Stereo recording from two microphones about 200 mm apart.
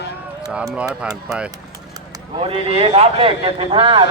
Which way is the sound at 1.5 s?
20° right (ahead or behind).